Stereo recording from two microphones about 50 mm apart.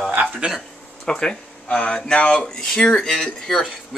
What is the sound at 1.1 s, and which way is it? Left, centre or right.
Speech, centre.